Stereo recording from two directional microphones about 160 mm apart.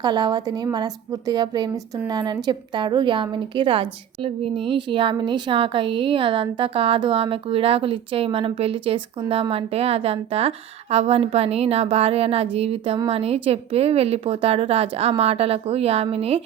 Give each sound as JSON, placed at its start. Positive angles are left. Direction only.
{"t": 0.0, "sound": "a woman's voice", "side_deg": -25}